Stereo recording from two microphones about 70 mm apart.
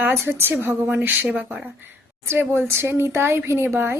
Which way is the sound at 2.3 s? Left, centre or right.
Right.